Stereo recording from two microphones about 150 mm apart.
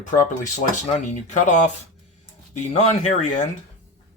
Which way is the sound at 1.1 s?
55° left (ahead or behind).